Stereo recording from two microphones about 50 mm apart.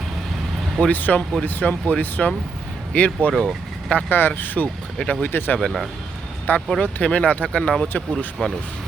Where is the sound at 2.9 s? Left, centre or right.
Left.